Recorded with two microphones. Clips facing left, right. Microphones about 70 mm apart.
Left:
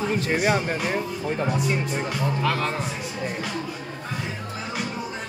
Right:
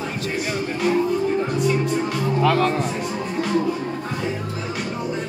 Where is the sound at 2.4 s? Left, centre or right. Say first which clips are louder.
Right 9 dB; centre.